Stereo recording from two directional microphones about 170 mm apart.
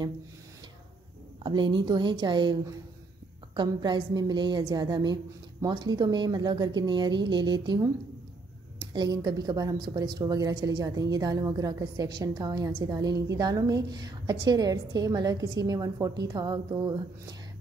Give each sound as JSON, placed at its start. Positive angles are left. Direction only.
{"t": 1.4, "sound": "a woman's voice", "side_deg": -30}
{"t": 8.9, "sound": "a woman's voice", "side_deg": -25}